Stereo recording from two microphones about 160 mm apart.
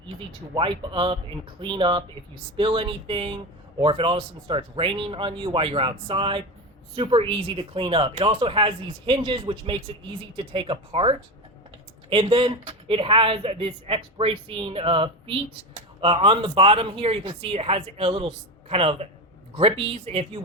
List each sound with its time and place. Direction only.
0.5 s speech: 30° right (ahead or behind)